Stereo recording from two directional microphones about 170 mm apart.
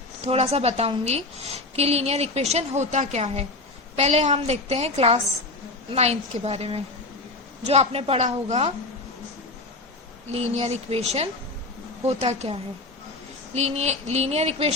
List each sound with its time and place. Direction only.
0.3 s a woman's voice: 35° right (ahead or behind)
10.3 s a woman's voice: 40° right (ahead or behind)
13.6 s a woman's voice: 40° right (ahead or behind)